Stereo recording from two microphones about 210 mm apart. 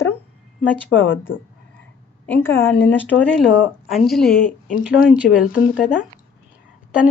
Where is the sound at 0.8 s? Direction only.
65° left (ahead or behind).